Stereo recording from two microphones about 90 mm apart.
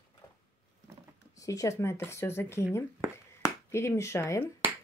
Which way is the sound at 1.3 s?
40° left (ahead or behind).